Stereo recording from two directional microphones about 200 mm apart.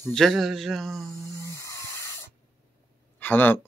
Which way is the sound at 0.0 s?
Centre (ahead or behind).